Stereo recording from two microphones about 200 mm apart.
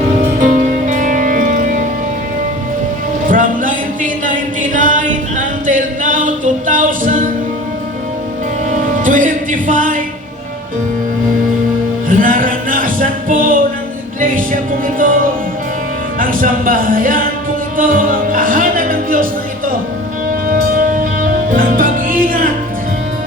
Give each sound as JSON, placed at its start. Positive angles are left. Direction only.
{"t": 0.3, "sound": "music", "side_deg": -40}
{"t": 3.2, "sound": "music", "side_deg": -40}
{"t": 4.6, "sound": "a capella", "side_deg": -40}
{"t": 9.0, "sound": "music", "side_deg": -40}
{"t": 12.0, "sound": "music", "side_deg": -40}
{"t": 16.2, "sound": "a sound", "side_deg": -45}
{"t": 17.7, "sound": "music", "side_deg": -40}